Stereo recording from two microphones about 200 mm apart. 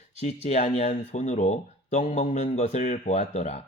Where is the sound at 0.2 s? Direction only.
35° left (ahead or behind).